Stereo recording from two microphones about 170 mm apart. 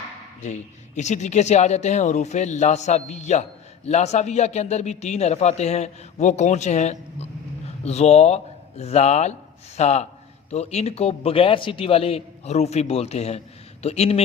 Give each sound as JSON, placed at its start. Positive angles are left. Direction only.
{"t": 0.4, "sound": "speech", "side_deg": 45}